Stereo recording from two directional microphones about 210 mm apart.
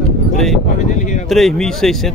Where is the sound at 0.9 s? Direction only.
35° left (ahead or behind).